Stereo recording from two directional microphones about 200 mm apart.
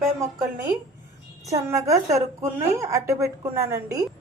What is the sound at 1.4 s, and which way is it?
A woman's voice, 15° right (ahead or behind).